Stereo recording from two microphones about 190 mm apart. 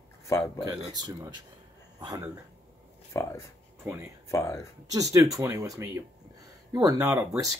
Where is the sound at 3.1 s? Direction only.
15° left (ahead or behind).